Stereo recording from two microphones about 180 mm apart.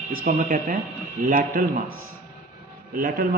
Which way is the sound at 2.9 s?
55° right (ahead or behind).